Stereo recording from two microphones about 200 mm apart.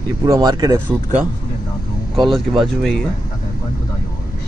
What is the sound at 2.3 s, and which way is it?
Speech, centre (ahead or behind).